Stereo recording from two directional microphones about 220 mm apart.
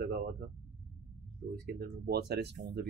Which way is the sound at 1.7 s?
45° right (ahead or behind).